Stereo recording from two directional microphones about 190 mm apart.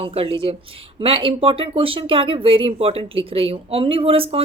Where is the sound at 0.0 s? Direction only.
30° right (ahead or behind).